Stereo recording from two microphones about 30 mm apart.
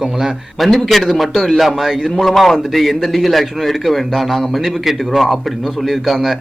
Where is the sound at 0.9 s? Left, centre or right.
Centre.